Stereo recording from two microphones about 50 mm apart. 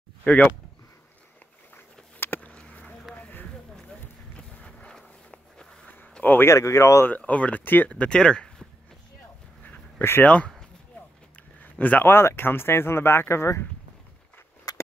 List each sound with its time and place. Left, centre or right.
0.2 s speech: left
2.1 s a sound: left
2.4 s a sound: left
4.4 s walk: left
6.4 s speech: left
7.2 s speech: left
8.1 s speech: centre
9.6 s a sound: left
10.2 s speech: left
11.8 s speech: left
12.1 s speech: left